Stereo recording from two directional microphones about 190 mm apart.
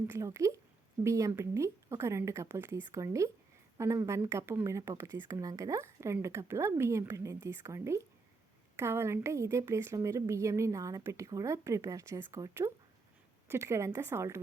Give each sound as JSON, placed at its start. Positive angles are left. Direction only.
{"t": 0.1, "sound": "a woman's voice", "side_deg": -15}